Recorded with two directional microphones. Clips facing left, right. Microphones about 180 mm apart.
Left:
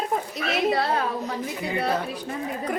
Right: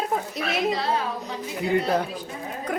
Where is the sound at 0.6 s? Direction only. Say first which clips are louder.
Left 4 dB; 60° left (ahead or behind).